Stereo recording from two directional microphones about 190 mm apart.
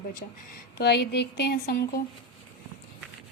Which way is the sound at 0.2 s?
45° left (ahead or behind).